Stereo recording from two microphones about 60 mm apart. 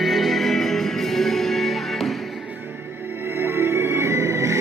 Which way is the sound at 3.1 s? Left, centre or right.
Right.